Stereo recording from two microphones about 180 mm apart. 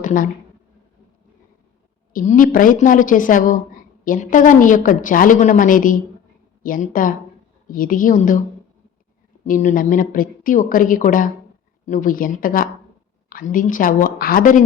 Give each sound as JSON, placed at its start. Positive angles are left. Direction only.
{"t": 0.0, "sound": "a woman's voice", "side_deg": 45}
{"t": 2.1, "sound": "speech", "side_deg": 50}
{"t": 9.4, "sound": "speech", "side_deg": 40}